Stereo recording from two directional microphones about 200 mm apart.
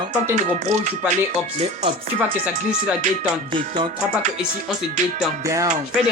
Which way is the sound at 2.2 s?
5° right (ahead or behind).